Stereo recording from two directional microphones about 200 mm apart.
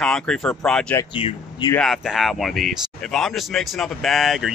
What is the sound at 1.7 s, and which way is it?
Speech, centre (ahead or behind).